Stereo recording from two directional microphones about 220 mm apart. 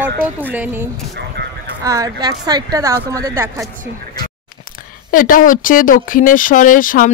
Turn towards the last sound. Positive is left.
turn(degrees=40)  # may be behind; listen again after turning